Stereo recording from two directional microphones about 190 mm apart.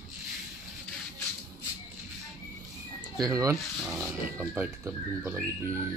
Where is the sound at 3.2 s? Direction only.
15° right (ahead or behind).